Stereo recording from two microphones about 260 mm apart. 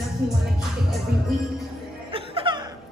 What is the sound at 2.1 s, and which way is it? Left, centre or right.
Music, centre.